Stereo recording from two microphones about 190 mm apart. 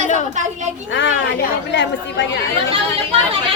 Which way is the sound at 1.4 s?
70° left (ahead or behind).